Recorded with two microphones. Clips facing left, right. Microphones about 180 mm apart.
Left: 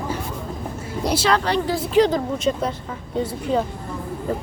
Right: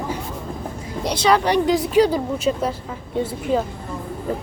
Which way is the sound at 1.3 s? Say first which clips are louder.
Right 4 dB; 15° right (ahead or behind).